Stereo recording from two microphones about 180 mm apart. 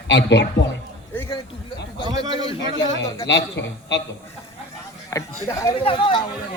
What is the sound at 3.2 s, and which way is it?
Speech, 70° left (ahead or behind).